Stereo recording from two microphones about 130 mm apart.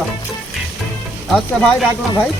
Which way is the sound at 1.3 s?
5° left (ahead or behind).